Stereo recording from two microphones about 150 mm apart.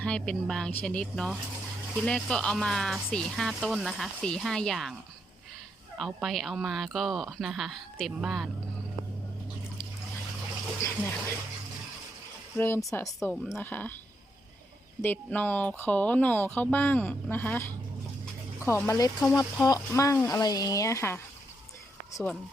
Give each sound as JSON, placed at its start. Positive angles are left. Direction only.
{"t": 0.0, "sound": "speech", "side_deg": 5}
{"t": 6.0, "sound": "speech", "side_deg": 0}
{"t": 10.8, "sound": "speech", "side_deg": 20}
{"t": 12.5, "sound": "speech", "side_deg": 15}
{"t": 15.0, "sound": "speech", "side_deg": 10}